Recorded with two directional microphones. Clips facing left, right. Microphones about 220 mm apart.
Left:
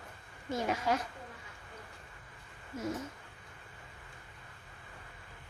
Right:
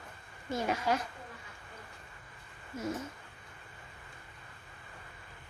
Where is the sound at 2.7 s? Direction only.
Centre (ahead or behind).